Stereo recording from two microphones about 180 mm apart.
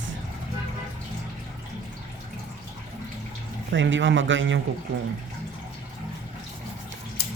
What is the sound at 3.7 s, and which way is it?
Speech, 90° right.